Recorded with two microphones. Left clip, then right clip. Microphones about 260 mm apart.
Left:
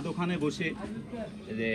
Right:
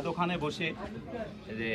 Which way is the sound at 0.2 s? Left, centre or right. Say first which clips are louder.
Left 2 dB; right.